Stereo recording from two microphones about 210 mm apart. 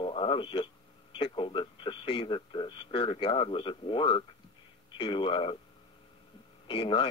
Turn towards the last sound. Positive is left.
turn(degrees=25)  # may be behind; listen again after turning